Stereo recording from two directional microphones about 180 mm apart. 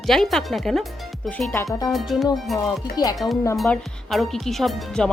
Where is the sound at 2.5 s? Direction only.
20° left (ahead or behind).